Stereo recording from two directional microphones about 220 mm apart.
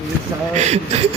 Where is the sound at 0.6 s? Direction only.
30° right (ahead or behind).